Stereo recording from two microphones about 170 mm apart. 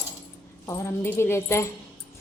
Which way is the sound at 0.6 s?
20° left (ahead or behind).